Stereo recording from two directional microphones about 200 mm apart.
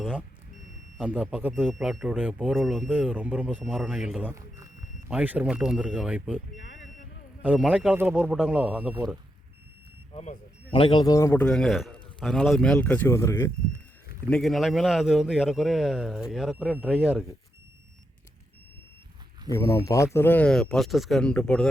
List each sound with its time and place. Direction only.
0.0 s speech: 5° right (ahead or behind)
7.4 s speech: 5° right (ahead or behind)
10.1 s a man's voice: 30° left (ahead or behind); by 13.5 s 15° left (ahead or behind)
14.3 s speech: centre (ahead or behind)
19.5 s a man's voice: 15° left (ahead or behind)